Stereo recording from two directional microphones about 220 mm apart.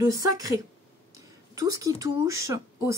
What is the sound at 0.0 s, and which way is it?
Speech, 15° right (ahead or behind).